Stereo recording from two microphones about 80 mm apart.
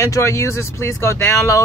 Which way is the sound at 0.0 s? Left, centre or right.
Left.